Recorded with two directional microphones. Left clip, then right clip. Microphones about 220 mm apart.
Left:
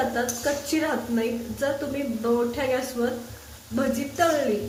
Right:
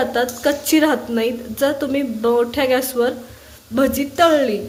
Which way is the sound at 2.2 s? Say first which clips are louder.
Right 8 dB; 40° right (ahead or behind).